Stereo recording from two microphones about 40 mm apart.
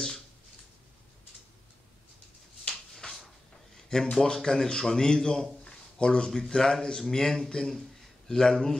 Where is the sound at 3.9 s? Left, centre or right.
Centre.